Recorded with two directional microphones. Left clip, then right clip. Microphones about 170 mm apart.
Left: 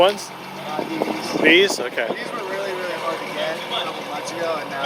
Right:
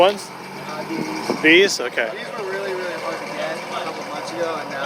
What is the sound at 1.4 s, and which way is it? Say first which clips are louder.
Speech: right 1 dB; 20° right (ahead or behind).